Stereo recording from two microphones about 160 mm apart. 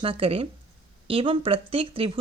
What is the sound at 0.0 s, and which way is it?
Speech, 35° right (ahead or behind).